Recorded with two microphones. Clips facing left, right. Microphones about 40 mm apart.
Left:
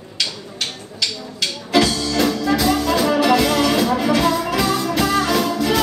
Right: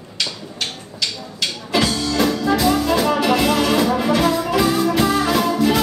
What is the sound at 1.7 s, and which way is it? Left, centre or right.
Music, centre.